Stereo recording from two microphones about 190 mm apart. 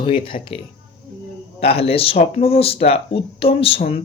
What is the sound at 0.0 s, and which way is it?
Speech, 25° left (ahead or behind).